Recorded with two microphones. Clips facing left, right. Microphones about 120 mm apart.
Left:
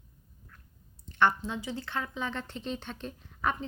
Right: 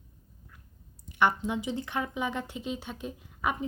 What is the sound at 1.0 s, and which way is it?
Speech, 10° right (ahead or behind).